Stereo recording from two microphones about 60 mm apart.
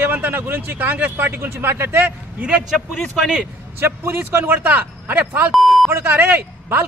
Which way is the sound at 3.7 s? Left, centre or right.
Right.